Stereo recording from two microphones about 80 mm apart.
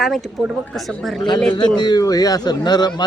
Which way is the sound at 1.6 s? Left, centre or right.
Left.